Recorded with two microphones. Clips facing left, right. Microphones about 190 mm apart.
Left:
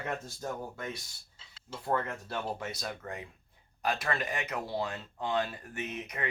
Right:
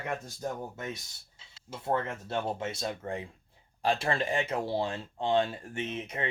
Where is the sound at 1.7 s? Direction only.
25° right (ahead or behind).